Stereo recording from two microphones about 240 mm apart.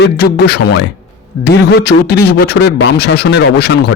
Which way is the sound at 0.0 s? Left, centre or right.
Left.